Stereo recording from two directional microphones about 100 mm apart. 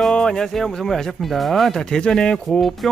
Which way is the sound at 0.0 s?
5° left (ahead or behind).